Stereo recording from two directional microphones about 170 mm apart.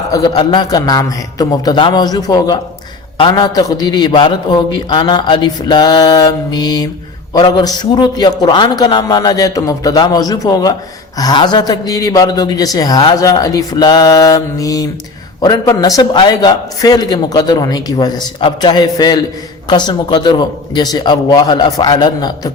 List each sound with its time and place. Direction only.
0.1 s a man's voice: 25° left (ahead or behind)